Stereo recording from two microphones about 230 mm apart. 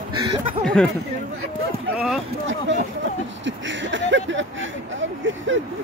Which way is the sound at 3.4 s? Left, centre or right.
Right.